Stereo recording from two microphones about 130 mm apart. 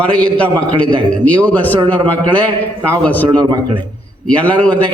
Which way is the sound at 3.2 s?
35° right (ahead or behind).